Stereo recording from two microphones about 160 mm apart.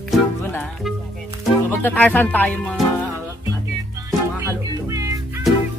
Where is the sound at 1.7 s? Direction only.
10° left (ahead or behind).